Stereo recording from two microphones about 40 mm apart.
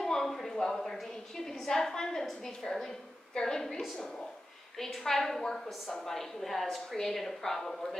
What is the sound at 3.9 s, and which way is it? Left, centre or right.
A woman's voice, centre.